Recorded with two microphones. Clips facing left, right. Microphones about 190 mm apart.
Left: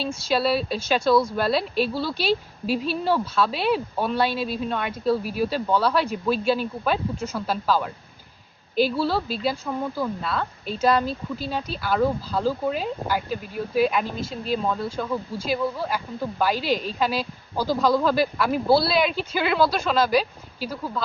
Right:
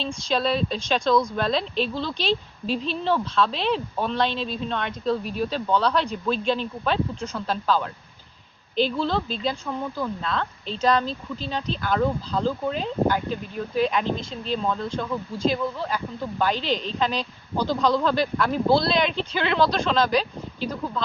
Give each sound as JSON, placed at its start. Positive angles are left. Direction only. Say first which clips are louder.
{"t": 0.0, "sound": "speech", "louder": "left 2 dB", "side_deg": 5}